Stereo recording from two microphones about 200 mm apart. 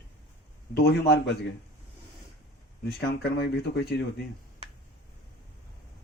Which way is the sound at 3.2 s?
55° left (ahead or behind).